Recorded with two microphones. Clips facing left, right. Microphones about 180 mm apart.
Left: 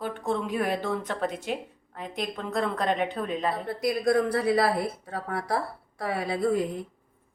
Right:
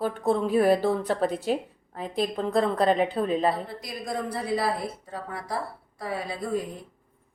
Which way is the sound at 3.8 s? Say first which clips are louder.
Left 9 dB; 70° left (ahead or behind).